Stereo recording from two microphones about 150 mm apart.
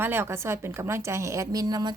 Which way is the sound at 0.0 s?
15° right (ahead or behind).